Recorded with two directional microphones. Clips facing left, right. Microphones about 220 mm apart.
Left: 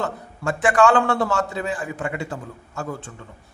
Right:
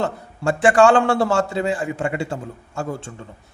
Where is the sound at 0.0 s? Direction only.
30° right (ahead or behind).